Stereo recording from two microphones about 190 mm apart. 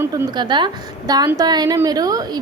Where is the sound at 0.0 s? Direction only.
15° right (ahead or behind).